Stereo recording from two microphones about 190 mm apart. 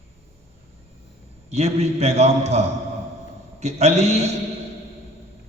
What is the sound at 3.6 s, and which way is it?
Speech, 35° right (ahead or behind).